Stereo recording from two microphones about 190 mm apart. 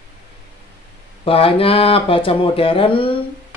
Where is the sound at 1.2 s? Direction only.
30° left (ahead or behind).